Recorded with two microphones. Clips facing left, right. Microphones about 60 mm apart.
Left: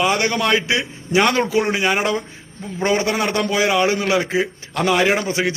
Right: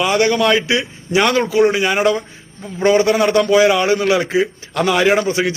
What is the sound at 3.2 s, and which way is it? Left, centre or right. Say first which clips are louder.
A man's voice: right 7 dB; centre.